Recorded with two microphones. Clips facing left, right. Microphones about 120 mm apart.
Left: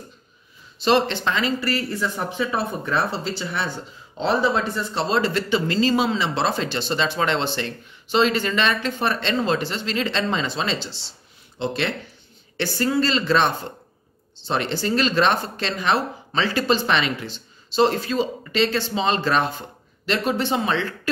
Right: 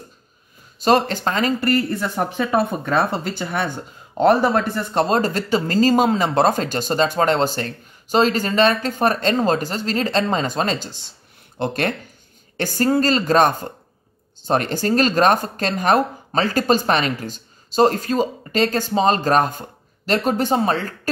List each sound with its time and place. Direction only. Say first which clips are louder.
0.7 s speech: right 2 dB; 45° right (ahead or behind)